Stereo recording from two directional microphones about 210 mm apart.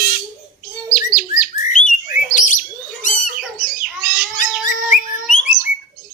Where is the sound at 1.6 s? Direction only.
35° left (ahead or behind).